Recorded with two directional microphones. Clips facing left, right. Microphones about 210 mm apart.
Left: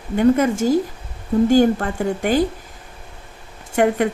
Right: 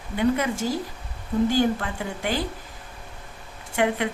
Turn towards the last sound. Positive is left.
turn(degrees=45)  # may be behind; listen again after turning